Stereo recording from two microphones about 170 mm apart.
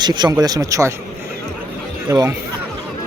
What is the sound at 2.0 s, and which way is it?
Speech, 20° right (ahead or behind).